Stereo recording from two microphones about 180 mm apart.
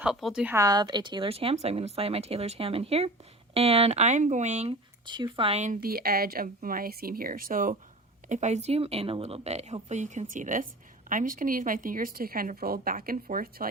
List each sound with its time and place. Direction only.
0.0 s speech: centre (ahead or behind)
0.5 s speech: 20° right (ahead or behind); by 4.8 s 35° right (ahead or behind)
5.0 s speech: 25° right (ahead or behind); by 13.7 s 50° right (ahead or behind)